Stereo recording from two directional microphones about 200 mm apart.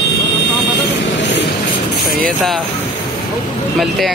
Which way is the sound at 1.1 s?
60° left (ahead or behind).